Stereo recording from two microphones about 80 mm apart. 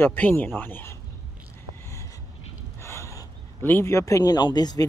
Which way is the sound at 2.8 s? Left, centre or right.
Left.